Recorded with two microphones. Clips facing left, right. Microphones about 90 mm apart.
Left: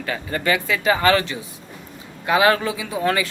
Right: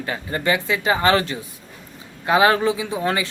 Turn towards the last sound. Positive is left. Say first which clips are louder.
# left 1 dB
turn(degrees=-25)  # may be behind; listen again after turning